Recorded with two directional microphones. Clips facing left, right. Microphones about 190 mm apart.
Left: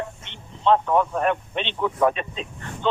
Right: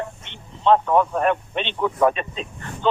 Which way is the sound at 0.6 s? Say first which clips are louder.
Right 2 dB; 50° right (ahead or behind).